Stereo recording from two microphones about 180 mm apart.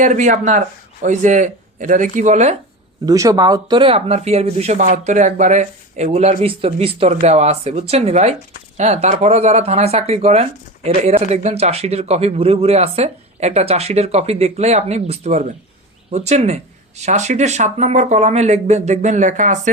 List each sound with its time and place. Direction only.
0.0 s speech: 45° right (ahead or behind)
3.1 s speech: 20° right (ahead or behind); by 19.7 s 45° right (ahead or behind)